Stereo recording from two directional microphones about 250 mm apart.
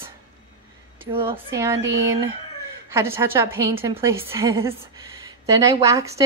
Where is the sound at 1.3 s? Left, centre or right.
Centre.